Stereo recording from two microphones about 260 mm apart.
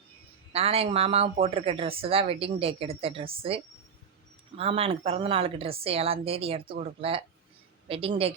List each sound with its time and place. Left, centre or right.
0.5 s speech: right